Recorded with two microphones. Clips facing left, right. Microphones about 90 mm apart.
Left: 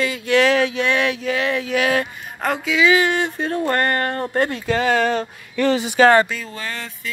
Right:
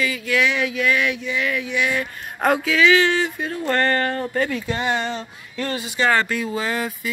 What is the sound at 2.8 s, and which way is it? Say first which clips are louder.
Speech: left 2 dB; 15° left (ahead or behind).